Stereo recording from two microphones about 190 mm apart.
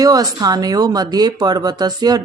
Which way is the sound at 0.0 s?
20° right (ahead or behind).